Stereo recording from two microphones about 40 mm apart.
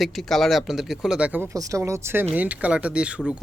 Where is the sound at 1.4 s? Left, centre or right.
Right.